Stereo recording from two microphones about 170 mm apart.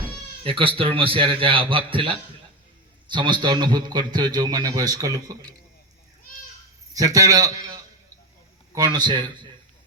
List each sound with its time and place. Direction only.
0.4 s a man's voice: 30° right (ahead or behind)
6.9 s a man's voice: 20° right (ahead or behind)